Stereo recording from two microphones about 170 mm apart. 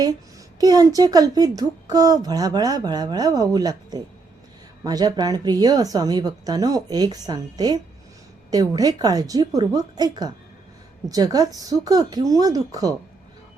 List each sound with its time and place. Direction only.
0.6 s speech: 20° right (ahead or behind)